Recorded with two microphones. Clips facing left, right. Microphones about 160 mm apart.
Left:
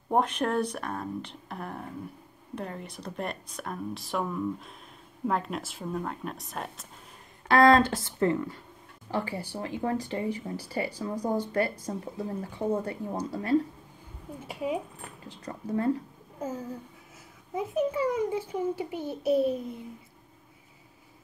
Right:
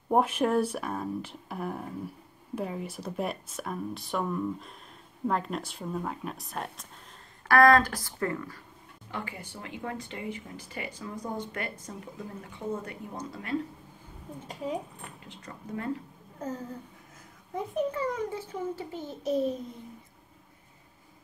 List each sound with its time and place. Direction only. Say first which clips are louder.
0.1 s speech: right 2 dB; 5° right (ahead or behind)
7.4 s speech: left 1 dB; 25° left (ahead or behind)
9.1 s speech: left 7 dB; 35° left (ahead or behind)
14.5 s a child's voice: left 3 dB; 10° left (ahead or behind)
15.4 s speech: left 7 dB; 35° left (ahead or behind)
16.3 s a sound: left 2 dB; 10° left (ahead or behind)
17.6 s a child's voice: left 3 dB; 10° left (ahead or behind)